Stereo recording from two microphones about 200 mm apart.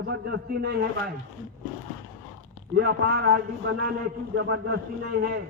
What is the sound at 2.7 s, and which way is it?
Speech, 50° right (ahead or behind).